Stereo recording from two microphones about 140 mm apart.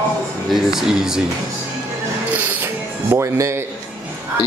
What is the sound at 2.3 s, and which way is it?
Music, 15° right (ahead or behind).